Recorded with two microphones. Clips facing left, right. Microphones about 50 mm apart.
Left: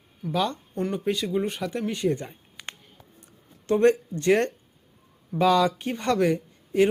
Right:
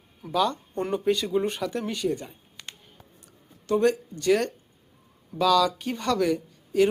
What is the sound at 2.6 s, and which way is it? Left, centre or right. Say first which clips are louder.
Music: left 4 dB; centre.